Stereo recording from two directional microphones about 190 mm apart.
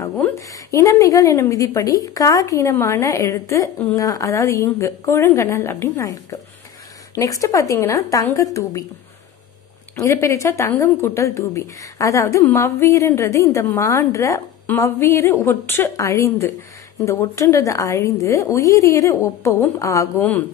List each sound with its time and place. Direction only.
0.4 s a woman's voice: 15° left (ahead or behind)
9.9 s a woman's voice: 15° left (ahead or behind)